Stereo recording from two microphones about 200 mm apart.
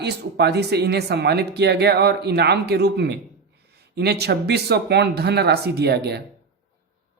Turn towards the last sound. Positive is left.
turn(degrees=-55)  # may be behind; listen again after turning